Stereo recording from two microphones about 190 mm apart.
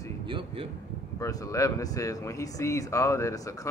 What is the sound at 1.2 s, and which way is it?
Speech, 20° left (ahead or behind).